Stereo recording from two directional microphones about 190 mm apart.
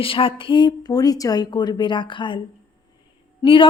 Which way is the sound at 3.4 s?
25° left (ahead or behind).